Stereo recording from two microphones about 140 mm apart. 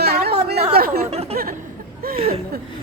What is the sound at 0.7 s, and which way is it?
Speech, 90° right.